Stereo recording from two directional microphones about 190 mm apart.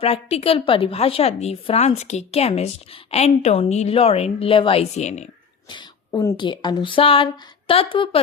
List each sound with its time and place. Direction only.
0.0 s a woman's voice: 30° left (ahead or behind)
5.6 s speech: 25° left (ahead or behind)